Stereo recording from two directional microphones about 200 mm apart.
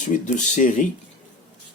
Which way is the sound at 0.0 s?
40° left (ahead or behind).